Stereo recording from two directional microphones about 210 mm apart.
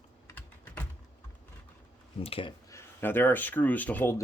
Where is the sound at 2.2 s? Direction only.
25° left (ahead or behind).